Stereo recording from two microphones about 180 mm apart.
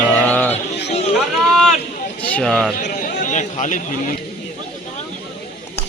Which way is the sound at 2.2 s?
10° left (ahead or behind).